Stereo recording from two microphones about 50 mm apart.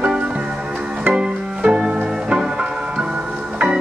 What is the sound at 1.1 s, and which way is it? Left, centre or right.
Music, centre.